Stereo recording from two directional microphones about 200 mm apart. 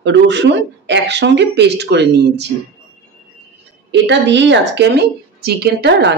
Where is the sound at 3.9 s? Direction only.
60° right (ahead or behind).